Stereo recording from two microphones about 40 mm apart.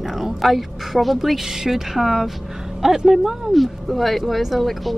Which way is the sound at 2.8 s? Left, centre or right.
Right.